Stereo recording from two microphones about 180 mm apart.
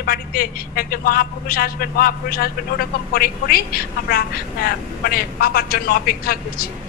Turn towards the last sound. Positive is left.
turn(degrees=55)  # may be behind; listen again after turning